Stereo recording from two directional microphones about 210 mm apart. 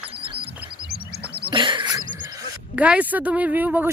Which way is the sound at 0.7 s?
50° right (ahead or behind).